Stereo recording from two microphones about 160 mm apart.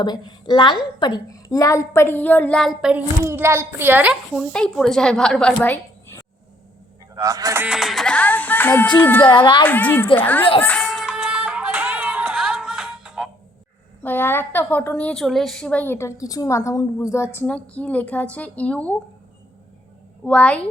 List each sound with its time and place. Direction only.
0.0 s a woman's voice: 25° left (ahead or behind); by 3.0 s centre (ahead or behind)
3.2 s a child's voice: 15° right (ahead or behind)
4.4 s speech: 5° left (ahead or behind)
7.2 s speech: 20° right (ahead or behind)
7.7 s a woman's voice: centre (ahead or behind)
9.2 s speech: 30° left (ahead or behind)
9.6 s a woman's voice: 10° left (ahead or behind)
10.6 s music: 5° left (ahead or behind)
14.0 s a woman's voice: 10° left (ahead or behind)
20.2 s a woman's voice: 5° left (ahead or behind)